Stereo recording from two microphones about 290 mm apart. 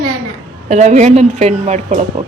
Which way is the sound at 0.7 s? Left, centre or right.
Right.